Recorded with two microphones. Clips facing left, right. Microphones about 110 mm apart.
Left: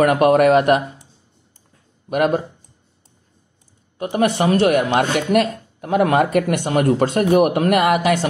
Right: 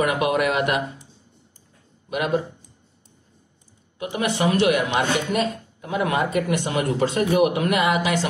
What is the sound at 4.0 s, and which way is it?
Speech, 45° left (ahead or behind).